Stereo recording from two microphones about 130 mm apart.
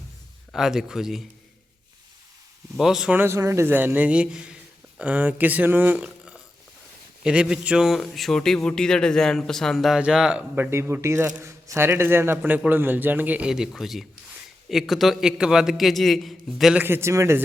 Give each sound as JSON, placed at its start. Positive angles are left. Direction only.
{"t": 0.5, "sound": "speech", "side_deg": -5}
{"t": 2.7, "sound": "speech", "side_deg": -5}
{"t": 3.2, "sound": "a man's voice", "side_deg": -20}
{"t": 16.8, "sound": "a man's voice", "side_deg": -20}